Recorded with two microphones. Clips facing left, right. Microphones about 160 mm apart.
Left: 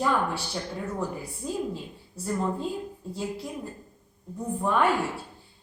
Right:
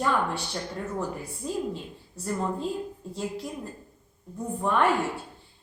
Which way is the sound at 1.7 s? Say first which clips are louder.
Even; centre (ahead or behind).